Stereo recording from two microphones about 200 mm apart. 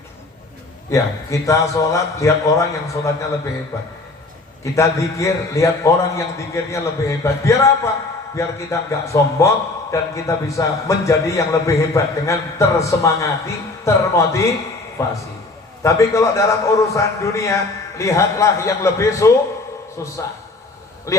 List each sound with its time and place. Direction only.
0.9 s a man's voice: 15° left (ahead or behind)
4.6 s a man's voice: 15° left (ahead or behind)